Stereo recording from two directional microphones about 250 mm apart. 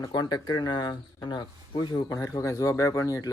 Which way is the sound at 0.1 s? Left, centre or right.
Centre.